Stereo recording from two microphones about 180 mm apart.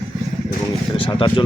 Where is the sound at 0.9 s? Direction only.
25° left (ahead or behind).